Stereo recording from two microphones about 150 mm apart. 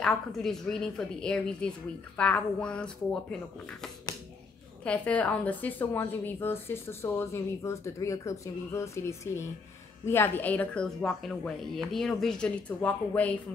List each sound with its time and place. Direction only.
0.0 s a woman's voice: 5° left (ahead or behind)